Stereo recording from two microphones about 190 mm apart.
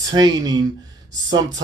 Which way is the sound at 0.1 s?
20° right (ahead or behind).